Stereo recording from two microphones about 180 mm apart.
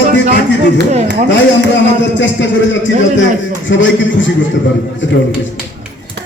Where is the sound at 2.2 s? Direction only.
90° left.